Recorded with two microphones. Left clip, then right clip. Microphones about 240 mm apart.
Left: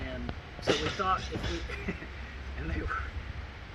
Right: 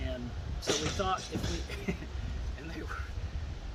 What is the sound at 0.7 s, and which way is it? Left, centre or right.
Speech, right.